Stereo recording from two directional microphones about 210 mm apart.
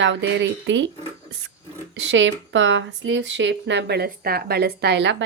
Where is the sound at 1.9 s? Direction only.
60° right (ahead or behind).